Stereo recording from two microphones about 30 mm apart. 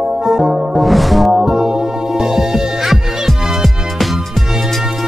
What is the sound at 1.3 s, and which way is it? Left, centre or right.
Music, centre.